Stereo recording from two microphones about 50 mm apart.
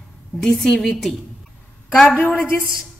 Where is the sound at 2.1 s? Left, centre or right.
Left.